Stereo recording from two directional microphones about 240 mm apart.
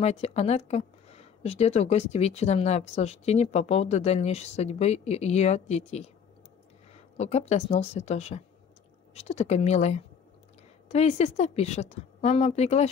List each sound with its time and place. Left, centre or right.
0.0 s speech: left